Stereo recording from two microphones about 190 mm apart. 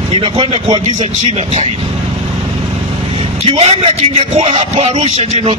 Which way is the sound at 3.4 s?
30° right (ahead or behind).